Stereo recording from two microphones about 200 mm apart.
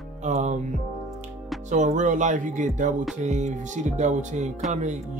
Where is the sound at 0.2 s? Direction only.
35° right (ahead or behind).